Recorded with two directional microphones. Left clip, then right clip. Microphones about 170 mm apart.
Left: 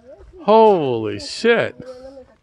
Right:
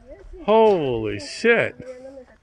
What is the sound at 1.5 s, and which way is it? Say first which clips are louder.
Speech: left 2 dB; 20° left (ahead or behind).